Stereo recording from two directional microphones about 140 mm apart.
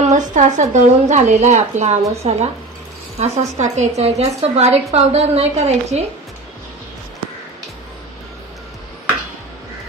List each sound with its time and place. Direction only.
0.1 s a woman's voice: 60° right (ahead or behind)